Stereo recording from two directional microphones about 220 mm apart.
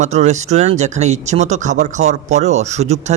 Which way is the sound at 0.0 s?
30° right (ahead or behind).